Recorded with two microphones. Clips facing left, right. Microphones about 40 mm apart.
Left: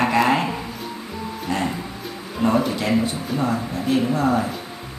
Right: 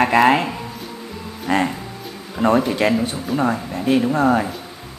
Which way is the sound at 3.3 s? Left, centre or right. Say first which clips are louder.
Right 3 dB; right.